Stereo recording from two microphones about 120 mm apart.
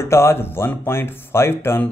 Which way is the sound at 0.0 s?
20° left (ahead or behind).